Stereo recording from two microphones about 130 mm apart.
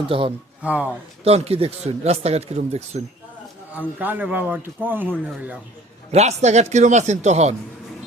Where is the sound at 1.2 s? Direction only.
50° right (ahead or behind).